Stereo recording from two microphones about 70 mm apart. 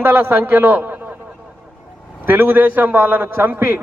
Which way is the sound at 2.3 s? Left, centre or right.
Right.